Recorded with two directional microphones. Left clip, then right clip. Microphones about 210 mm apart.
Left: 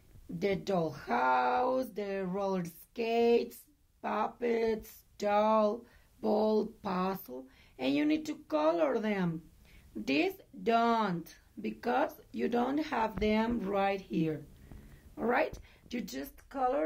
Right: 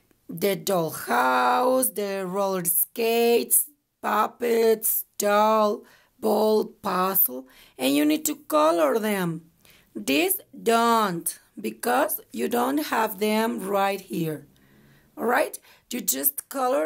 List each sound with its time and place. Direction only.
0.4 s speech: 50° right (ahead or behind)